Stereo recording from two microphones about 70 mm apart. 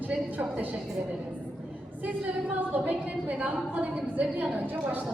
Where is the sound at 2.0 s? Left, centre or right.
Right.